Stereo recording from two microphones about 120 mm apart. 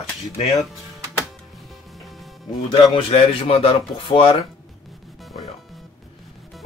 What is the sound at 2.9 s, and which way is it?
Speech, 50° left (ahead or behind).